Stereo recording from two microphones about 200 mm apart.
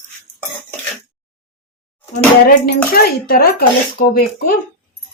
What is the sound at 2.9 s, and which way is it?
Speech, 50° left (ahead or behind).